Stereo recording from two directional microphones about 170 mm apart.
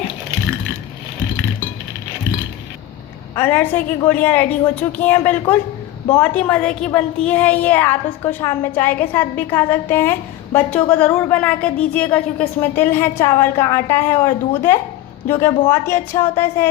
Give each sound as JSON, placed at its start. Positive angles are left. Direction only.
{"t": 3.3, "sound": "a child's voice", "side_deg": 10}